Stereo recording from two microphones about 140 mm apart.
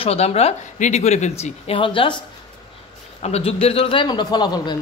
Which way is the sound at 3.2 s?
45° left (ahead or behind).